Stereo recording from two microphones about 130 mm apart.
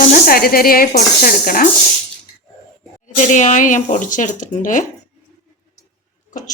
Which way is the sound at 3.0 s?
70° left (ahead or behind).